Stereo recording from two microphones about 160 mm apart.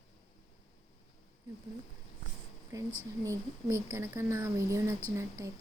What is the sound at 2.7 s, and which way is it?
Speech, 20° right (ahead or behind).